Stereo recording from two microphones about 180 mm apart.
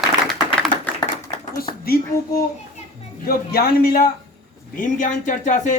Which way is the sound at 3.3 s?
55° left (ahead or behind).